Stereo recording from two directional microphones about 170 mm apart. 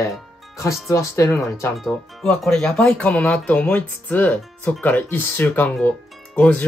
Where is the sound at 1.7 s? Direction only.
Centre (ahead or behind).